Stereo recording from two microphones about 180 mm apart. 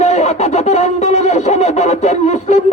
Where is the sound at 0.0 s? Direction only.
35° left (ahead or behind).